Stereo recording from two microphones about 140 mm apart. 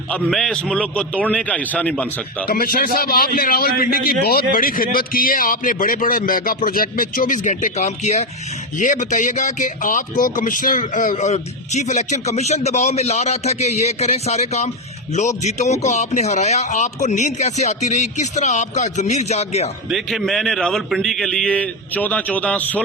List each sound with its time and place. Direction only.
0.1 s a man's voice: 5° left (ahead or behind)
2.5 s a man's voice: 90° left; by 19.7 s 50° left (ahead or behind)
19.9 s a man's voice: centre (ahead or behind)